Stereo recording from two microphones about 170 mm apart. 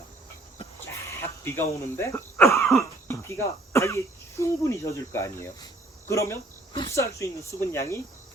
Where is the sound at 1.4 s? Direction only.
15° left (ahead or behind).